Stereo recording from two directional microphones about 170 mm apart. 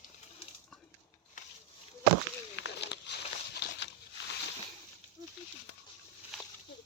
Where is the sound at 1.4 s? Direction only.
50° left (ahead or behind).